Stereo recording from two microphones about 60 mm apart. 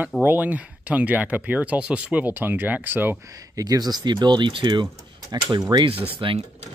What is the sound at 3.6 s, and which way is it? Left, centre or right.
Speech, right.